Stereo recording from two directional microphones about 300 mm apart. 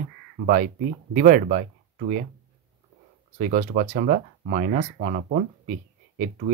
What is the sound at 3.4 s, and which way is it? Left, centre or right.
Speech, right.